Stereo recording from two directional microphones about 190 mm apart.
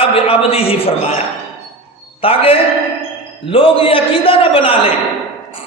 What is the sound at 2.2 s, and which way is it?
A man's voice, 30° left (ahead or behind).